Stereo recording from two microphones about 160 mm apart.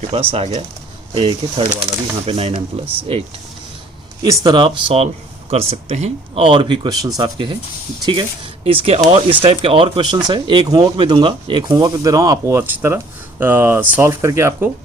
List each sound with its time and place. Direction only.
0.1 s speech: 35° right (ahead or behind)
4.2 s speech: 25° right (ahead or behind)
8.6 s speech: 40° right (ahead or behind); by 14.7 s 15° right (ahead or behind)